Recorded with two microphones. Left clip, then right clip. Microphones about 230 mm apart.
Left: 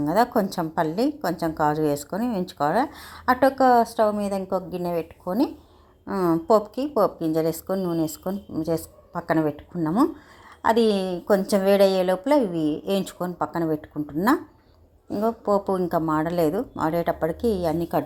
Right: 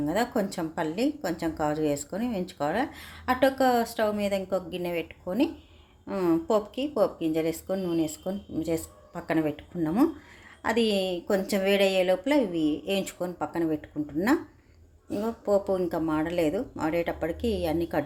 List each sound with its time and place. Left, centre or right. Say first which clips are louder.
0.0 s a woman's voice: left 6 dB; centre
2.9 s speech: left 6 dB; centre
3.8 s a woman's voice: left 5 dB; centre